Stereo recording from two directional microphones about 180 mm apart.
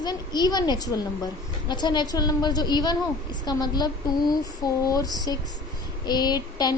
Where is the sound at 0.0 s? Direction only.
20° left (ahead or behind).